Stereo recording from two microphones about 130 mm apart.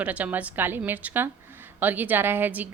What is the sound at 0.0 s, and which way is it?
A woman's voice, 10° right (ahead or behind).